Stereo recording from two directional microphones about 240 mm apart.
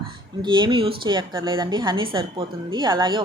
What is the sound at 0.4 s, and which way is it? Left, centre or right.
A woman's voice, centre.